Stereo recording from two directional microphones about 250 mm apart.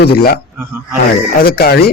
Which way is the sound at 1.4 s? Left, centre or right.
Left.